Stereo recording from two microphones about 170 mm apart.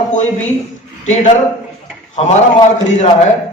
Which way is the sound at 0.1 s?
45° left (ahead or behind).